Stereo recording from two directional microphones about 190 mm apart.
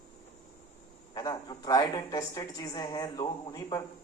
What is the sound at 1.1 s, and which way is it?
A woman's voice, 20° left (ahead or behind).